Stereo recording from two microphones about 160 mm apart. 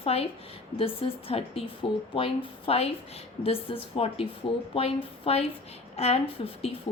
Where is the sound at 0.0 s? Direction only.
40° left (ahead or behind).